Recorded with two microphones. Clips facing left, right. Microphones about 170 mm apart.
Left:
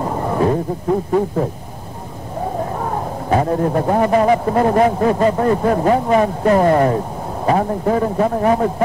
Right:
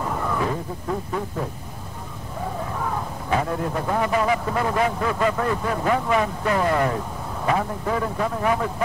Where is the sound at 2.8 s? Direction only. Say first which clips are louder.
Left 6 dB; 40° left (ahead or behind).